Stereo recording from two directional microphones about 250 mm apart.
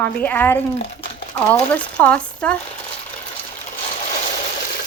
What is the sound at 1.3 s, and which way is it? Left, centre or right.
A woman's voice, centre.